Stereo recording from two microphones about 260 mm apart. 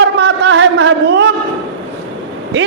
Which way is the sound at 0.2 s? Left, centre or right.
Right.